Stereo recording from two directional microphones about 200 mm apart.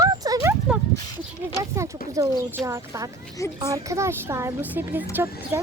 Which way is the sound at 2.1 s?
15° right (ahead or behind).